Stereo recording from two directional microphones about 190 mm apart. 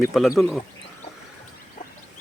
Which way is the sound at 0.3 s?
Centre (ahead or behind).